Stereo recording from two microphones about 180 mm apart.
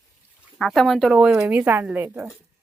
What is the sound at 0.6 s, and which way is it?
A woman's voice, centre (ahead or behind).